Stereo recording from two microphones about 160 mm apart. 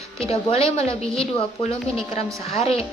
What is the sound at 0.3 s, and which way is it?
A woman's voice, 40° left (ahead or behind).